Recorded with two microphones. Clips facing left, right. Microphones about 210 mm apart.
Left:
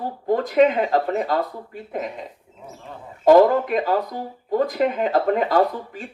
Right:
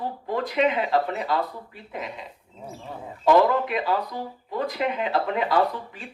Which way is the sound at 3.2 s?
45° left (ahead or behind).